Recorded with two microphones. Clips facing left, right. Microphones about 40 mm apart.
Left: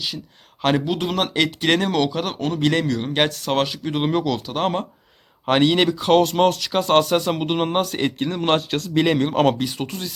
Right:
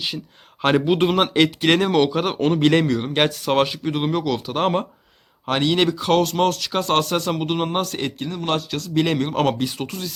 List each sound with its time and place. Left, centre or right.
0.9 s speech: right
1.1 s speech: centre
2.4 s speech: right
2.6 s speech: centre
3.9 s speech: centre
4.4 s speech: centre
5.5 s speech: centre
8.2 s speech: left
9.0 s speech: centre